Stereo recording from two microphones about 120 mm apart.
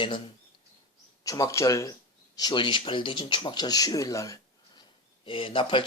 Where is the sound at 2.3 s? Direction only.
40° left (ahead or behind).